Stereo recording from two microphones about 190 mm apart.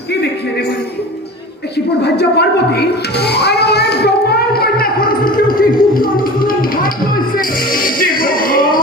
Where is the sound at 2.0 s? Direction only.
60° left (ahead or behind).